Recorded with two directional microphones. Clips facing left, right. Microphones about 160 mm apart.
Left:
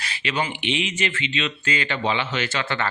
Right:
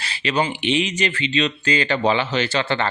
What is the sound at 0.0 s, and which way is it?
Speech, 35° right (ahead or behind).